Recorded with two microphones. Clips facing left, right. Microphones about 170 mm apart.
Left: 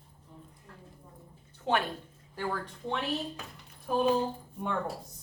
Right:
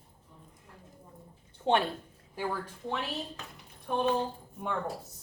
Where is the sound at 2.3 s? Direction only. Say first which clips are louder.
Even; 10° right (ahead or behind).